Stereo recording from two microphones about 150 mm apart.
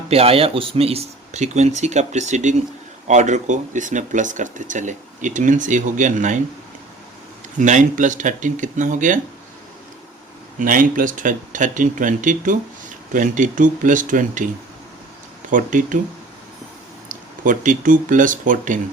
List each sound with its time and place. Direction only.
0.1 s speech: 40° right (ahead or behind); by 6.4 s 55° right (ahead or behind)
7.6 s speech: 55° right (ahead or behind)
10.6 s speech: 65° right (ahead or behind)
17.1 s speech: 60° right (ahead or behind)